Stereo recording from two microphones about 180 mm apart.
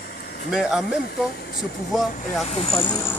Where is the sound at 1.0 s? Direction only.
65° left (ahead or behind).